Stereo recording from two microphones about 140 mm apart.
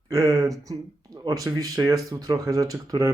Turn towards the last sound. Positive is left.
turn(degrees=-25)  # may be behind; listen again after turning